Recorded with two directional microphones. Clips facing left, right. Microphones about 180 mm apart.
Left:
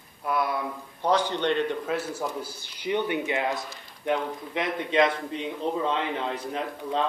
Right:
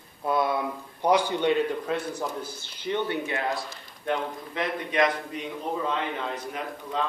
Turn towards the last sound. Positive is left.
turn(degrees=30)  # may be behind; listen again after turning